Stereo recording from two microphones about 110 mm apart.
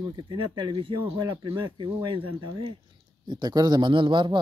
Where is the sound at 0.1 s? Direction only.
50° right (ahead or behind).